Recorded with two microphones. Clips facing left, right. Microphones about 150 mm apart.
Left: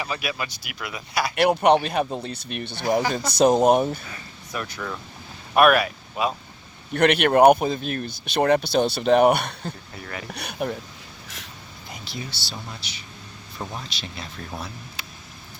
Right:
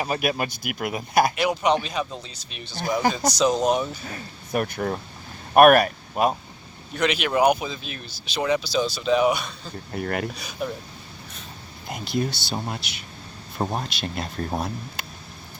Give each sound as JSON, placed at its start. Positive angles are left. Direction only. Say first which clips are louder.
{"t": 0.0, "sound": "speech", "louder": "right 5 dB", "side_deg": -50}
{"t": 1.4, "sound": "speech", "louder": "left 4 dB", "side_deg": 60}
{"t": 4.1, "sound": "speech", "louder": "right 7 dB", "side_deg": -50}
{"t": 6.9, "sound": "speech", "louder": "left 5 dB", "side_deg": 60}
{"t": 9.9, "sound": "speech", "louder": "right 9 dB", "side_deg": -55}
{"t": 10.3, "sound": "speech", "louder": "left 2 dB", "side_deg": 65}
{"t": 11.9, "sound": "speech", "louder": "right 10 dB", "side_deg": -55}